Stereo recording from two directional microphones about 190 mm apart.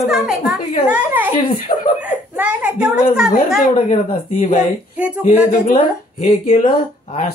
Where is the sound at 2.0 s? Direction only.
10° right (ahead or behind).